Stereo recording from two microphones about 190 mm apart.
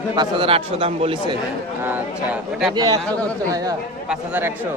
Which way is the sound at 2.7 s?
20° right (ahead or behind).